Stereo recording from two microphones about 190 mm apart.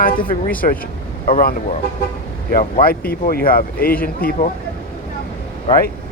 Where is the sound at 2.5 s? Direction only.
50° left (ahead or behind).